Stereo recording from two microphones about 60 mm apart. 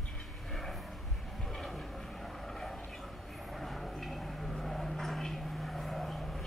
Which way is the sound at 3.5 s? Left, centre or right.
Centre.